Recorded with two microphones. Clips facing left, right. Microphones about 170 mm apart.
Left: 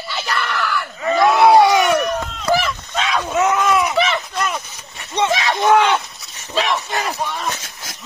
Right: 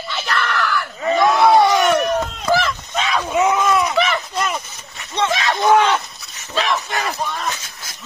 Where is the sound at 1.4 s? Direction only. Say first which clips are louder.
Left 3 dB; 15° left (ahead or behind).